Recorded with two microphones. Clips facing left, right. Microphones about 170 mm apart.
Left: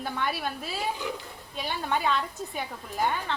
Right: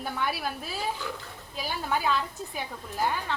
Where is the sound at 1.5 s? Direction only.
Centre (ahead or behind).